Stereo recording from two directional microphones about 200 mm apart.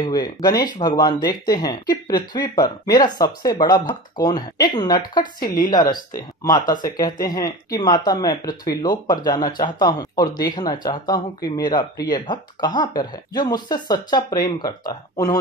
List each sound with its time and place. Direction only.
0.0 s speech: 20° left (ahead or behind)
5.4 s a woman's voice: 45° left (ahead or behind)
5.7 s speech: 20° left (ahead or behind)